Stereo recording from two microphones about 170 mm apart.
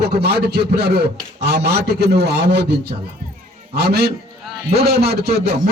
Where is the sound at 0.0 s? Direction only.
70° right (ahead or behind).